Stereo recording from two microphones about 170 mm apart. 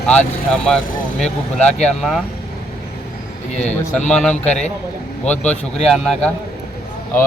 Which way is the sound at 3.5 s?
40° left (ahead or behind).